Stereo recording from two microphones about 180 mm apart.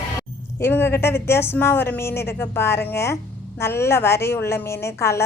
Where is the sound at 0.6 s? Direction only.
15° left (ahead or behind).